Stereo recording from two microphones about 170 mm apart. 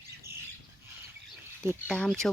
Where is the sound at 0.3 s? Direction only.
15° right (ahead or behind).